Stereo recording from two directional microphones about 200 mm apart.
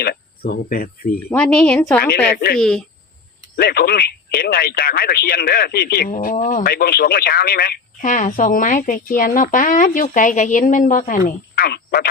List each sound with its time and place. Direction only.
0.0 s speech: 50° left (ahead or behind)
1.3 s speech: 5° left (ahead or behind)
3.5 s speech: 50° left (ahead or behind)